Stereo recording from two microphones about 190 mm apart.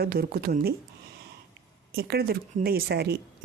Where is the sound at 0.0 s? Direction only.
55° right (ahead or behind).